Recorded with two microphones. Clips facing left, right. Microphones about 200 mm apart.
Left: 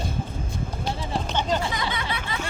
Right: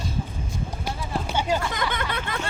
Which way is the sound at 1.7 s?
55° right (ahead or behind).